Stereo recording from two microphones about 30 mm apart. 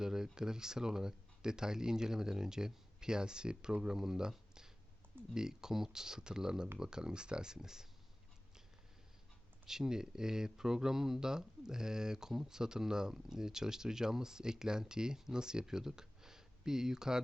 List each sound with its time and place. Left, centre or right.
0.0 s speech: centre
9.6 s speech: centre